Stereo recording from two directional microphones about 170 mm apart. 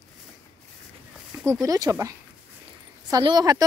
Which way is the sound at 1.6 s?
20° right (ahead or behind).